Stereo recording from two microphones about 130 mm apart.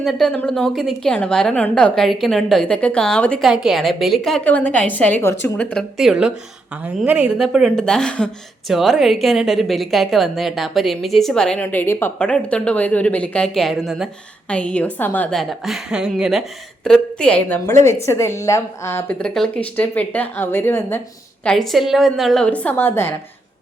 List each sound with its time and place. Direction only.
0.0 s a woman's voice: centre (ahead or behind); by 5.5 s 20° left (ahead or behind)
5.5 s a woman's voice: centre (ahead or behind)
11.6 s speech: 15° left (ahead or behind)
15.4 s a woman's voice: centre (ahead or behind)
16.8 s speech: 5° left (ahead or behind)
17.7 s a woman's voice: 20° left (ahead or behind)
19.2 s speech: 5° left (ahead or behind)
21.4 s a woman's voice: 5° left (ahead or behind)